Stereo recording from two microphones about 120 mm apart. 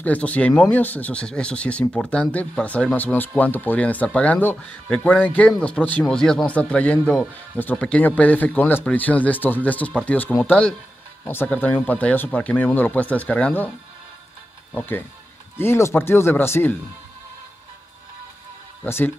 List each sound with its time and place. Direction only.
0.0 s speech: 10° left (ahead or behind)
14.8 s speech: 15° left (ahead or behind)
18.9 s speech: 20° left (ahead or behind)